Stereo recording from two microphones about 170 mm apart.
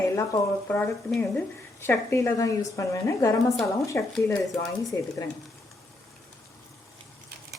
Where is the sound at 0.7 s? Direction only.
10° left (ahead or behind).